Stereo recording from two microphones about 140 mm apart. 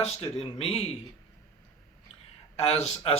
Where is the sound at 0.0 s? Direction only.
45° left (ahead or behind).